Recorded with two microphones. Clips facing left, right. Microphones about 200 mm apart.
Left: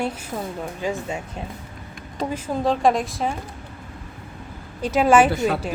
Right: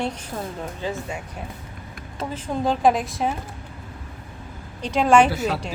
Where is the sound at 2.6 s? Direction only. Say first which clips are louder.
Even; centre (ahead or behind).